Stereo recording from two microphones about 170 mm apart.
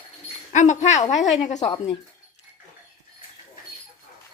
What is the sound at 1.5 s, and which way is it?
Speech, 40° left (ahead or behind).